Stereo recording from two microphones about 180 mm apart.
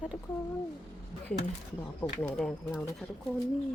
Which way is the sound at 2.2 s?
Centre (ahead or behind).